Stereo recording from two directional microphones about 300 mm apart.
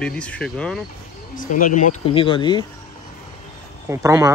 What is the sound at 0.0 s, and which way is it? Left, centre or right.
Speech, centre.